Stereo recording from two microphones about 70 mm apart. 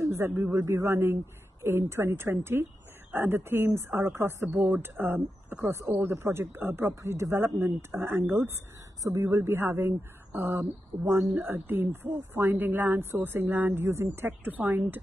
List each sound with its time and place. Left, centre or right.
0.0 s speech: right
5.6 s speech: right
9.0 s a woman's voice: right